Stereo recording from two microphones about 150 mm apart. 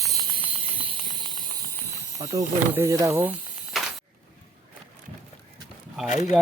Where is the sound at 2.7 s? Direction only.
20° right (ahead or behind).